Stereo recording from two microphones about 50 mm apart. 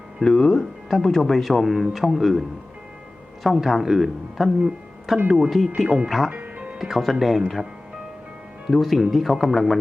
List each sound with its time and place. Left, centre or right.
0.2 s speech: centre
0.9 s speech: centre
3.4 s speech: centre
6.3 s music: right
6.7 s speech: centre
8.7 s speech: centre